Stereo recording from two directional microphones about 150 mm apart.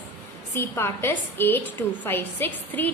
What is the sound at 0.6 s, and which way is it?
A woman's voice, 15° left (ahead or behind).